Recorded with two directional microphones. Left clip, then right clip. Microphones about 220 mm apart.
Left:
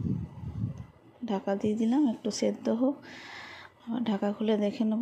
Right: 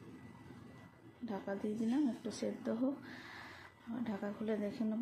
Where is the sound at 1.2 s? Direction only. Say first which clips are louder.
Left 11 dB; 35° left (ahead or behind).